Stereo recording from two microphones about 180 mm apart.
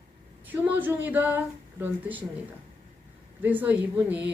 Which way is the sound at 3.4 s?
10° right (ahead or behind).